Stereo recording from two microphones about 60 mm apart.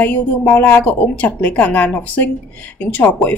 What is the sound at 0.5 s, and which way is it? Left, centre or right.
Speech, left.